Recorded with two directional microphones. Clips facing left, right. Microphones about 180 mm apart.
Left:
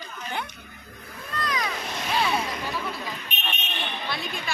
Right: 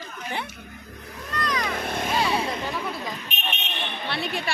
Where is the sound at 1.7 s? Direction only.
55° right (ahead or behind).